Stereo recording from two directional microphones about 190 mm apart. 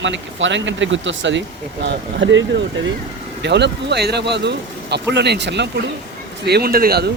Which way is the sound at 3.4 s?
65° right (ahead or behind).